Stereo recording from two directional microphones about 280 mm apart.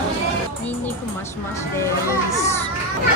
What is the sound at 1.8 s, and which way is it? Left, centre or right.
Children playing, centre.